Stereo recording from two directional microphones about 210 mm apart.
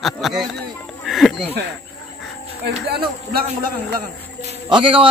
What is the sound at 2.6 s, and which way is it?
Speech, 50° right (ahead or behind).